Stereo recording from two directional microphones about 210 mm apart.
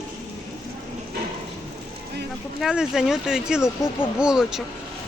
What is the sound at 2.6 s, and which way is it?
Speech, centre (ahead or behind).